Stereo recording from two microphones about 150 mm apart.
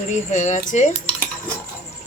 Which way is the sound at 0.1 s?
55° left (ahead or behind).